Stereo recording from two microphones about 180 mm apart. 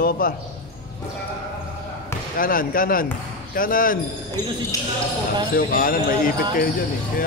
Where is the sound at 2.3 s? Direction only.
50° left (ahead or behind).